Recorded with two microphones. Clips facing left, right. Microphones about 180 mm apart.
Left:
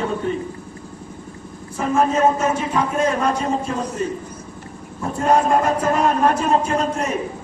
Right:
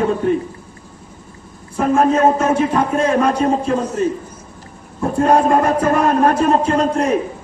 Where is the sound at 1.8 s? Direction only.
55° right (ahead or behind).